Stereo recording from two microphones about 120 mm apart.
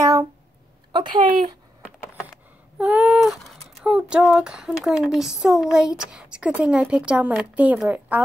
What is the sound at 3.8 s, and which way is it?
A woman's voice, 10° right (ahead or behind).